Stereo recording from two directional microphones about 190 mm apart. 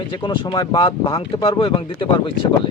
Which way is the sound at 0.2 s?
25° left (ahead or behind).